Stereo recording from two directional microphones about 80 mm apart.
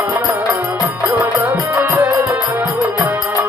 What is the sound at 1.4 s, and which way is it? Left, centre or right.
Music, right.